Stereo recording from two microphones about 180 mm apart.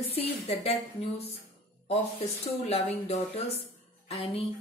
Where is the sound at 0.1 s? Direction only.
35° left (ahead or behind).